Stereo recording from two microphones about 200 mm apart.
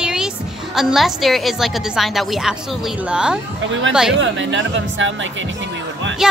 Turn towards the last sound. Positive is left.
turn(degrees=-5)  # may be behind; listen again after turning